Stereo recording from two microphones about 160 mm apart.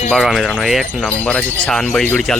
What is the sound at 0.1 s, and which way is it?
Speech, centre (ahead or behind).